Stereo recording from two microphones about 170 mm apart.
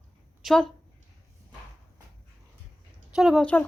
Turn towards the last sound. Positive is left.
turn(degrees=5)  # may be behind; listen again after turning